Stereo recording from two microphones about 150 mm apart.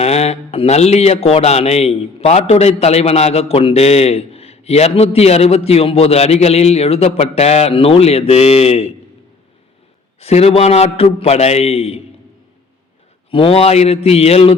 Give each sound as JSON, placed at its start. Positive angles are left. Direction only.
{"t": 0.0, "sound": "speech", "side_deg": 45}
{"t": 10.2, "sound": "speech", "side_deg": 45}
{"t": 13.3, "sound": "speech", "side_deg": 40}